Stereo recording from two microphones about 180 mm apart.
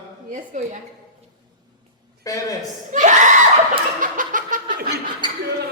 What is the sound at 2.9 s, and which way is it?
Speech, 45° right (ahead or behind).